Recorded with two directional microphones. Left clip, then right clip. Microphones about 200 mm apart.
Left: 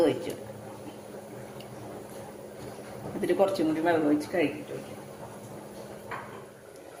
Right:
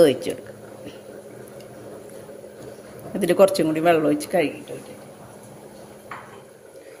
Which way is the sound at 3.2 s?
50° right (ahead or behind).